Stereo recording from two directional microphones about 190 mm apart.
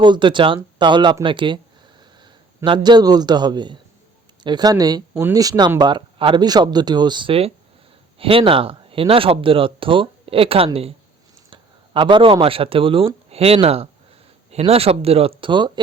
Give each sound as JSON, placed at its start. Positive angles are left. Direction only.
{"t": 0.0, "sound": "a man's voice", "side_deg": -25}